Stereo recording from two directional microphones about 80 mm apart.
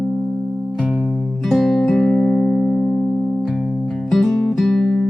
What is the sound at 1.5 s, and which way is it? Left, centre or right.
Music, centre.